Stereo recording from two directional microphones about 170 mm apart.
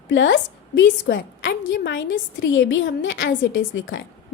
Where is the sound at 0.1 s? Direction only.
90° left.